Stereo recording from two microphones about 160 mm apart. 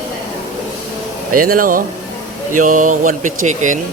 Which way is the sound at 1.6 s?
60° right (ahead or behind).